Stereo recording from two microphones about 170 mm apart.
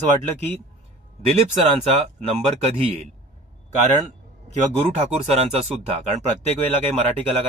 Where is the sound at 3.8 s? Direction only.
45° right (ahead or behind).